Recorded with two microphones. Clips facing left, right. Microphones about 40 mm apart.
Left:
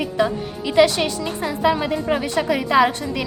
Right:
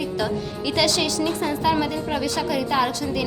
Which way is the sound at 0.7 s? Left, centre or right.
Left.